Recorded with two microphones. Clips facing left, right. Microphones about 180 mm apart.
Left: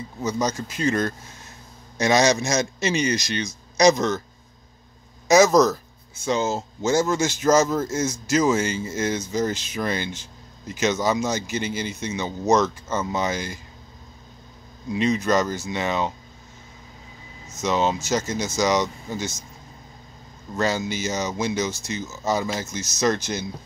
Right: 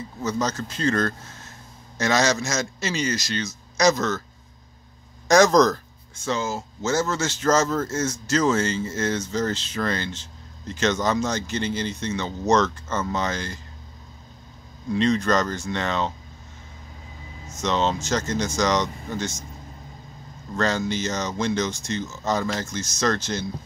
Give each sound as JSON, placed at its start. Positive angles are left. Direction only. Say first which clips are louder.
{"t": 0.2, "sound": "speech", "louder": "left 1 dB", "side_deg": 10}
{"t": 5.3, "sound": "speech", "louder": "left 1 dB", "side_deg": 5}
{"t": 14.9, "sound": "speech", "louder": "even", "side_deg": 10}
{"t": 17.6, "sound": "speech", "louder": "left 1 dB", "side_deg": 10}
{"t": 20.5, "sound": "speech", "louder": "even", "side_deg": 10}